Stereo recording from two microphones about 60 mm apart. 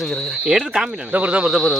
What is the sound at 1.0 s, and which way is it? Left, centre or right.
Speech, right.